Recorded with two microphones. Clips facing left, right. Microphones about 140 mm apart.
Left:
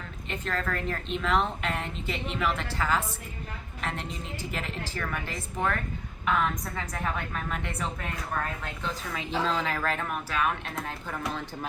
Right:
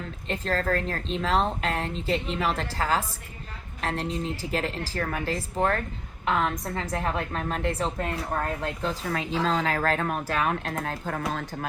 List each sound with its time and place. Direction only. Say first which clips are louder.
0.3 s speech: right 5 dB; 35° right (ahead or behind)